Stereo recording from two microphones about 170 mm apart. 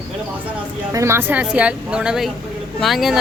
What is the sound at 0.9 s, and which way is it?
Speech, 15° right (ahead or behind).